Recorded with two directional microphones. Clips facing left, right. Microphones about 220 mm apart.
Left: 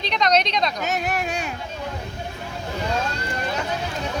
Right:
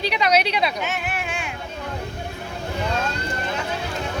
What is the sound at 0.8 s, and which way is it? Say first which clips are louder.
Speech: left 3 dB; 40° left (ahead or behind).